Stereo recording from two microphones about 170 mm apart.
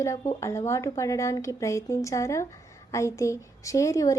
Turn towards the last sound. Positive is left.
turn(degrees=20)  # may be behind; listen again after turning